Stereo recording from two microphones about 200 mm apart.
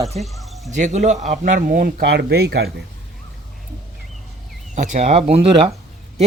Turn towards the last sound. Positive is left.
turn(degrees=-30)  # may be behind; listen again after turning